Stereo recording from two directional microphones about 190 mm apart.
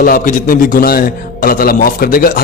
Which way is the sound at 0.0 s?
45° left (ahead or behind).